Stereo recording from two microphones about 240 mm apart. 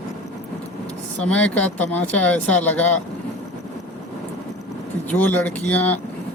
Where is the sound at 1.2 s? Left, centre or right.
Centre.